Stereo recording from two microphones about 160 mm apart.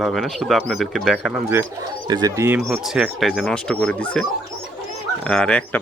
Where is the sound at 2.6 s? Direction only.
5° right (ahead or behind).